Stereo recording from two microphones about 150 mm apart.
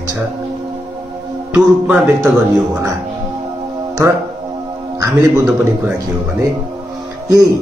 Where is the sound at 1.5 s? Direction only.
10° right (ahead or behind).